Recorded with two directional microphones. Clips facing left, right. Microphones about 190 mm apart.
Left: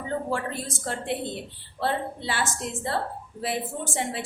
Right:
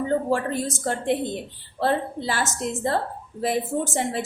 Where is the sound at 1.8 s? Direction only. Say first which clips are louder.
Right 4 dB; 45° right (ahead or behind).